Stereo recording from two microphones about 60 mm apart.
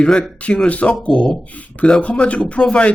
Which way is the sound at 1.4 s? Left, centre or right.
Left.